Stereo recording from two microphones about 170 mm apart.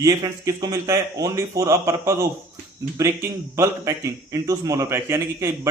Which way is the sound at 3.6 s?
20° right (ahead or behind).